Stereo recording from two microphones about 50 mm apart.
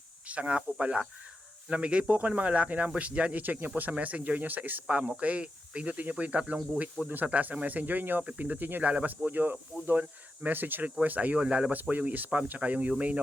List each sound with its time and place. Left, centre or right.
0.3 s speech: right
4.9 s speech: right
11.7 s speech: right